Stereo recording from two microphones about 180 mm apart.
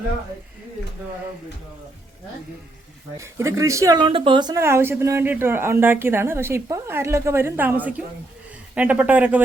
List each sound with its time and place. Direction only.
3.2 s a woman's voice: 15° right (ahead or behind)